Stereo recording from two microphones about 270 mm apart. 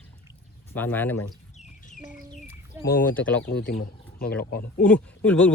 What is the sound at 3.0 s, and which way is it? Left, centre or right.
Speech, centre.